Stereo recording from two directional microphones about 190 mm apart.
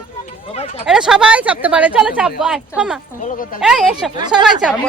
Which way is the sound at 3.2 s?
45° left (ahead or behind).